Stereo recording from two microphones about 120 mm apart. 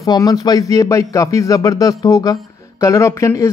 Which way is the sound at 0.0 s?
30° left (ahead or behind).